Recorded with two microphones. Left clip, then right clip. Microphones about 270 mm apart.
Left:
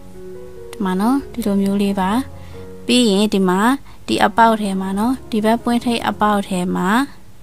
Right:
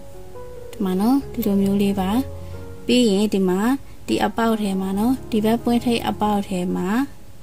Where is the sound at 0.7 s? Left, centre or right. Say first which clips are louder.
Left 2 dB; centre.